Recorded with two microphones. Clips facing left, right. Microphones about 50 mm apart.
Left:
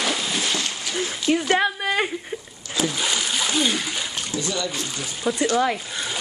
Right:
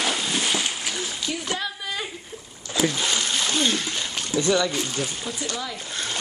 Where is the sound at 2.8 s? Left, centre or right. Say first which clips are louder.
Even; centre.